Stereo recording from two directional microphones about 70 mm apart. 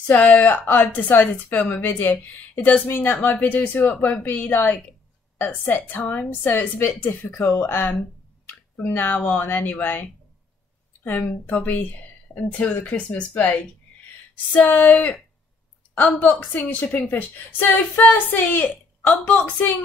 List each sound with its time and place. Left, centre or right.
0.0 s speech: left
11.4 s speech: left